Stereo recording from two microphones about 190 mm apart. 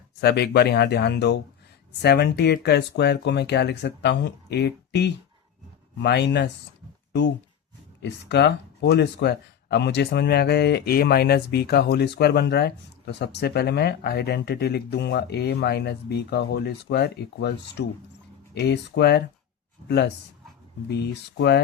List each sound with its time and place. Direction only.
0.2 s speech: 55° left (ahead or behind)
20.8 s speech: 60° left (ahead or behind)